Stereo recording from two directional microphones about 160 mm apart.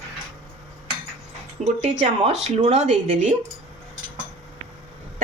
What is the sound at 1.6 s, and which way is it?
A woman's voice, 45° right (ahead or behind).